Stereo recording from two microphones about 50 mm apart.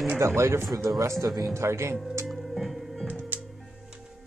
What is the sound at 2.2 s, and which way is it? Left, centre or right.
Music, centre.